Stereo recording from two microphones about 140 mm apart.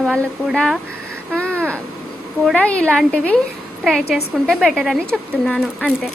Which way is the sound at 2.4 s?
5° left (ahead or behind).